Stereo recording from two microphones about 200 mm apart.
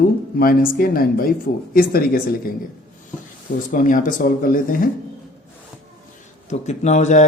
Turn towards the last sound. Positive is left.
turn(degrees=35)  # may be behind; listen again after turning